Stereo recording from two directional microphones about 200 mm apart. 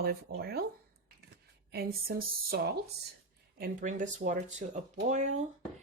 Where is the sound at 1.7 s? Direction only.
50° right (ahead or behind).